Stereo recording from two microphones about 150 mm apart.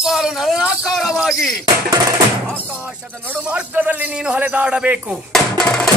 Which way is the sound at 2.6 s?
10° right (ahead or behind).